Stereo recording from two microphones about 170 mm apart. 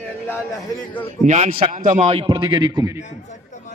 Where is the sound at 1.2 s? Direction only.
45° right (ahead or behind); by 3.0 s 20° right (ahead or behind).